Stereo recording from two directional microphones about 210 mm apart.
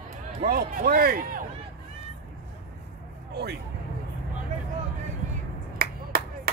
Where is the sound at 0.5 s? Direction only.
45° right (ahead or behind).